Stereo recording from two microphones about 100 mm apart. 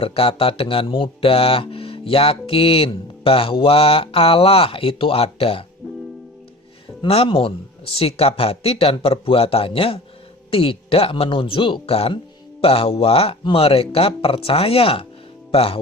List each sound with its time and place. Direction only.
0.0 s speech: 70° left (ahead or behind)
7.1 s speech: 70° left (ahead or behind)